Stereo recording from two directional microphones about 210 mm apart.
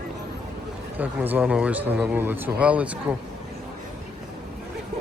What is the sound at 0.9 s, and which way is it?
Speech, 10° right (ahead or behind).